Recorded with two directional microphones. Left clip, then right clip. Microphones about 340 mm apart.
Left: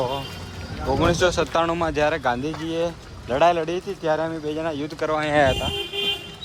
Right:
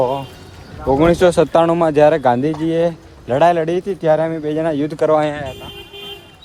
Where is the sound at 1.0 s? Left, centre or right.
Centre.